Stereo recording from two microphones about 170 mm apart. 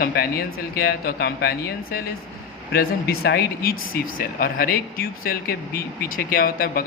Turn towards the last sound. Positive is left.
turn(degrees=60)  # may be behind; listen again after turning